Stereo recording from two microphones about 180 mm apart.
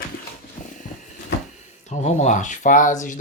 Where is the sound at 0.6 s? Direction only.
45° left (ahead or behind).